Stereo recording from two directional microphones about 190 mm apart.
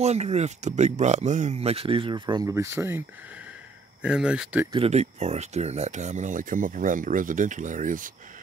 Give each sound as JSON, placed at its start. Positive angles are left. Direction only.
{"t": 0.0, "sound": "speech", "side_deg": -35}
{"t": 4.0, "sound": "speech", "side_deg": -5}
{"t": 4.7, "sound": "speech", "side_deg": -35}